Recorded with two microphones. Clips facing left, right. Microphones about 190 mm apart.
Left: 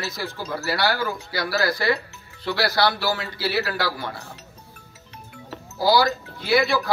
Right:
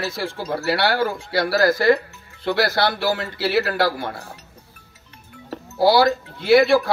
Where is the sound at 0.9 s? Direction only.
50° right (ahead or behind).